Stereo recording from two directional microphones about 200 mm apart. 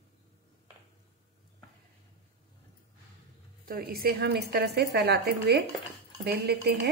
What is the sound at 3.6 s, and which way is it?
A woman's voice, 50° right (ahead or behind).